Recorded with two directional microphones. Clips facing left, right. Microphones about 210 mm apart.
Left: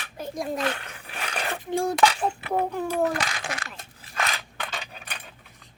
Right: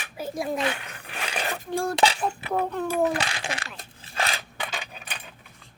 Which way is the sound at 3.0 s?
25° right (ahead or behind).